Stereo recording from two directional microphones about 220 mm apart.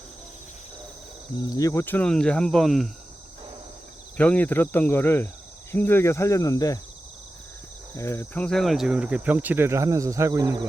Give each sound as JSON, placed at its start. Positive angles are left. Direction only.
{"t": 1.4, "sound": "speech", "side_deg": 15}
{"t": 4.2, "sound": "speech", "side_deg": 5}
{"t": 7.9, "sound": "speech", "side_deg": 10}